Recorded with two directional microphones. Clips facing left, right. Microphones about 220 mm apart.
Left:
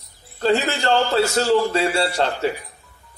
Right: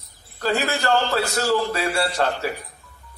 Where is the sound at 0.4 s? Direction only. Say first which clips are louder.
Left 3 dB; 25° left (ahead or behind).